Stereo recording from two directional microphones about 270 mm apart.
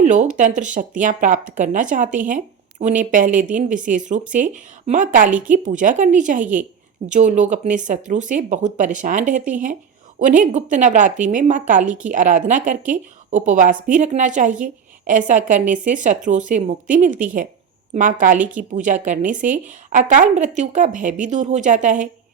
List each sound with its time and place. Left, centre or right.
0.0 s a woman's voice: right
11.9 s a woman's voice: centre
12.1 s a woman's voice: right